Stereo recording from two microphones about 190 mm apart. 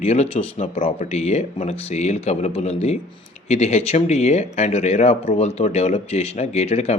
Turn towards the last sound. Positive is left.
turn(degrees=35)  # may be behind; listen again after turning